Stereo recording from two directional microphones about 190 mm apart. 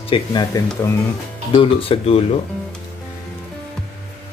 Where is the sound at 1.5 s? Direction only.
30° left (ahead or behind).